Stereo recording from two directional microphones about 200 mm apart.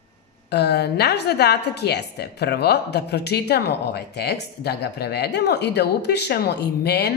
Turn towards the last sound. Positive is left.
turn(degrees=55)  # may be behind; listen again after turning